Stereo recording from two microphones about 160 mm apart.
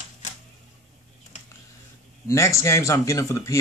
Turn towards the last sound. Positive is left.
turn(degrees=20)  # may be behind; listen again after turning